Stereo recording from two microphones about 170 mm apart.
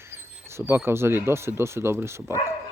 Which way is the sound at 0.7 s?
15° right (ahead or behind).